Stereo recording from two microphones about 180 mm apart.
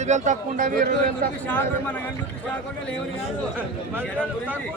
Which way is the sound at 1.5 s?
10° left (ahead or behind).